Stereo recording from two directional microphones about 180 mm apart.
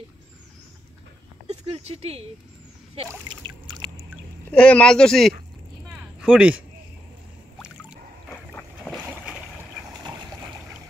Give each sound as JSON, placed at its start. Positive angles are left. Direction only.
{"t": 1.5, "sound": "speech", "side_deg": -35}
{"t": 3.4, "sound": "boat", "side_deg": -25}
{"t": 4.5, "sound": "speech", "side_deg": 5}
{"t": 5.9, "sound": "a sound", "side_deg": -5}
{"t": 8.5, "sound": "boat", "side_deg": 10}